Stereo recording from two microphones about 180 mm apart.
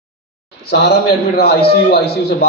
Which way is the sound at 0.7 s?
65° left (ahead or behind).